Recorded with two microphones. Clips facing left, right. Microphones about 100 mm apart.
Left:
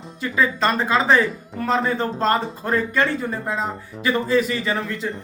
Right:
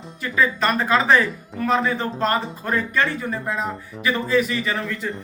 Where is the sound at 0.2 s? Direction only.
30° left (ahead or behind).